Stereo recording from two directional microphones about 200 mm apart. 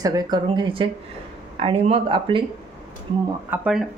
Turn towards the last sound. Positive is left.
turn(degrees=-5)  # may be behind; listen again after turning